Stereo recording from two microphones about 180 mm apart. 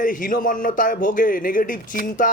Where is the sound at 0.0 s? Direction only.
50° left (ahead or behind).